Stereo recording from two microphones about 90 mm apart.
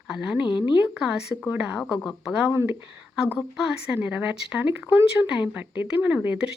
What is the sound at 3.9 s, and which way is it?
Speech, 20° right (ahead or behind).